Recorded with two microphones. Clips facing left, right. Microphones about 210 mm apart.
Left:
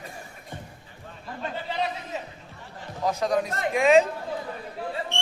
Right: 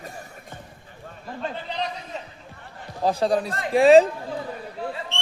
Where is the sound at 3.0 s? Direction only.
30° right (ahead or behind).